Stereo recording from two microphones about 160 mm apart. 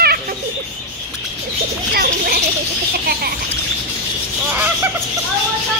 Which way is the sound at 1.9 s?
70° right (ahead or behind).